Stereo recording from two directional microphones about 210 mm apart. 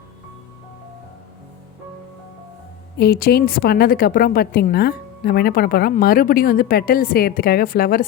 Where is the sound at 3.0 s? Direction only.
50° left (ahead or behind).